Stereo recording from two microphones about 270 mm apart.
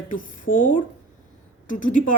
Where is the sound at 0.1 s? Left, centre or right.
Left.